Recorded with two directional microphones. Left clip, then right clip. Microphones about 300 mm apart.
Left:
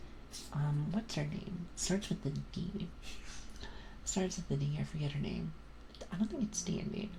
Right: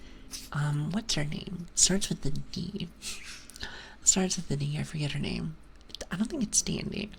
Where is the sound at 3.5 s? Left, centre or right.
Right.